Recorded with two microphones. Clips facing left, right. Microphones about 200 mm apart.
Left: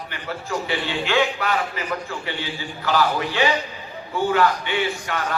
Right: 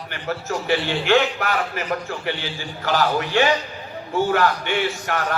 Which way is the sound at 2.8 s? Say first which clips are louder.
Even; 50° right (ahead or behind).